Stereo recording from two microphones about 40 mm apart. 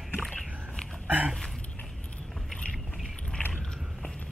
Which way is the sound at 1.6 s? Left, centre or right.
Left.